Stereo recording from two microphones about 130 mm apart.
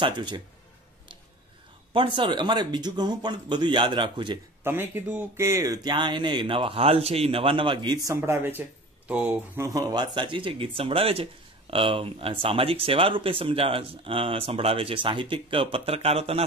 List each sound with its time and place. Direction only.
0.0 s speech: 35° right (ahead or behind)
2.0 s speech: 40° right (ahead or behind)
4.6 s speech: 15° right (ahead or behind); by 16.4 s 50° right (ahead or behind)